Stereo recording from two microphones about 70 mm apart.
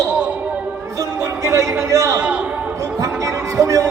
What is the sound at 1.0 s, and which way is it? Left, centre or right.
Music, right.